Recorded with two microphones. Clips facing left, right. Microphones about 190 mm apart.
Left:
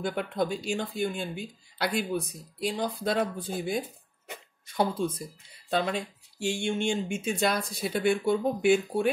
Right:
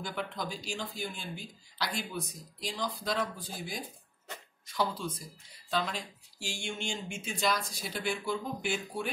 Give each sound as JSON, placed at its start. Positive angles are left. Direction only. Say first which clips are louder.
{"t": 0.1, "sound": "speech", "louder": "left 8 dB", "side_deg": 60}